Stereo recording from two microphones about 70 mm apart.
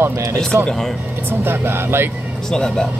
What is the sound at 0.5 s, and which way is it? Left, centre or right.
Speech, right.